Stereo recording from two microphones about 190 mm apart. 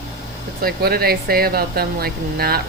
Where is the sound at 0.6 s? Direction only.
55° right (ahead or behind).